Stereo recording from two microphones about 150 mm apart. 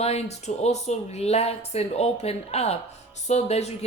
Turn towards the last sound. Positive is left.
turn(degrees=45)  # may be behind; listen again after turning